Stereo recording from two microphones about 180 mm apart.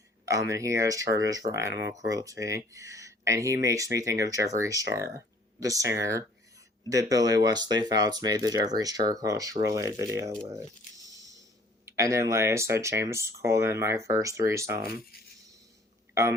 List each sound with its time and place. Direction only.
0.3 s speech: 20° right (ahead or behind)
11.9 s speech: 15° right (ahead or behind)